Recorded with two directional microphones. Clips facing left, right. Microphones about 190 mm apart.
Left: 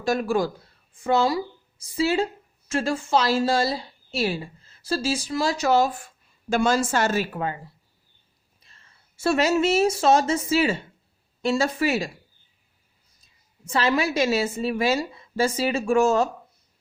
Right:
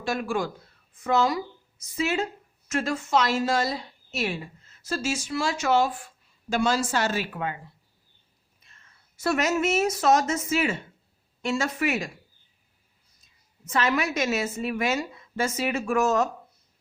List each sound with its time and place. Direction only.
0.0 s a woman's voice: 40° left (ahead or behind)
13.2 s a woman's voice: 30° left (ahead or behind)